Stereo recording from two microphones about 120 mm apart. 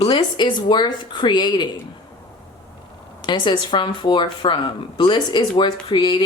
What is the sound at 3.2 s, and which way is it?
Speech, 40° left (ahead or behind).